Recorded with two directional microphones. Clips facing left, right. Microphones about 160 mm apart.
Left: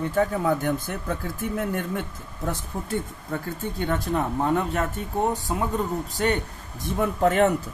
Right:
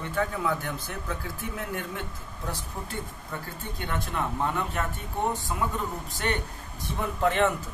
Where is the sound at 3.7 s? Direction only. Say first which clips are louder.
Left 6 dB; 40° left (ahead or behind).